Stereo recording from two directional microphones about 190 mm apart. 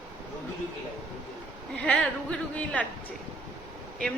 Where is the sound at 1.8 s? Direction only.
5° left (ahead or behind).